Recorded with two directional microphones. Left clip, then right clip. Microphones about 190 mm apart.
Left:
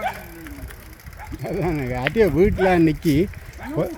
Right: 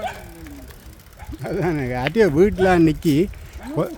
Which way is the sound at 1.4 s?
15° right (ahead or behind).